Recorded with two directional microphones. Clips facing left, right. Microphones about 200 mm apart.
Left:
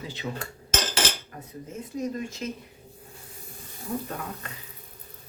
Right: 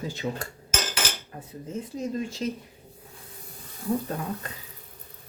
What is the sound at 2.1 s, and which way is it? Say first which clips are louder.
Speech: right 3 dB; 30° right (ahead or behind).